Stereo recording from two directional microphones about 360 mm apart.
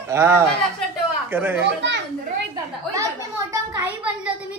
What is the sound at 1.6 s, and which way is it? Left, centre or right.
Speech, right.